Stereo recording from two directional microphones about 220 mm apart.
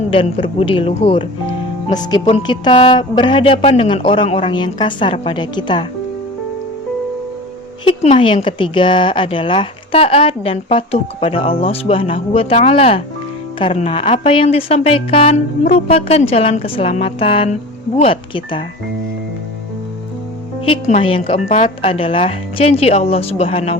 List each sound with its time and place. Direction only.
0.1 s speech: 25° left (ahead or behind)
7.9 s speech: 25° left (ahead or behind)
20.7 s speech: 30° left (ahead or behind)